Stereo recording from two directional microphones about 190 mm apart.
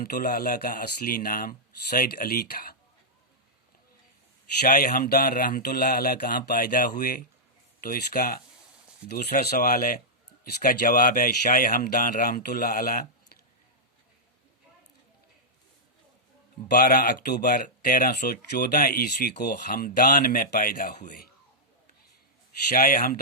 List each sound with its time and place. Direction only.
0.0 s speech: 50° left (ahead or behind)
4.6 s speech: 50° left (ahead or behind)
16.6 s speech: 55° left (ahead or behind)
22.7 s speech: 50° left (ahead or behind)